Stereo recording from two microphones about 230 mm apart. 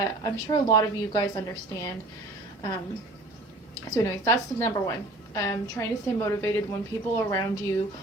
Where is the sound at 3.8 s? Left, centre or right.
Centre.